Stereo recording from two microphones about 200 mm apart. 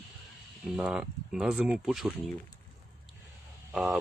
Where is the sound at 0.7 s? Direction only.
5° right (ahead or behind).